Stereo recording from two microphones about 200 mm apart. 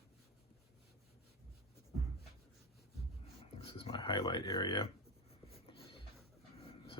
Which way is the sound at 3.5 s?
25° left (ahead or behind).